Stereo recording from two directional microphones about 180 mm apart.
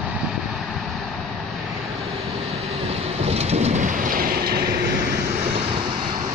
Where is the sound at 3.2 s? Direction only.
35° right (ahead or behind); by 4.8 s 60° right (ahead or behind).